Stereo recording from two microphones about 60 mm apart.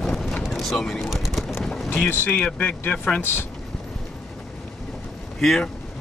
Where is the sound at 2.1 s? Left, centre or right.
Left.